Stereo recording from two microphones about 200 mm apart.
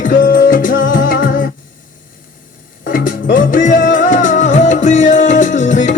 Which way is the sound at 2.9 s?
45° left (ahead or behind).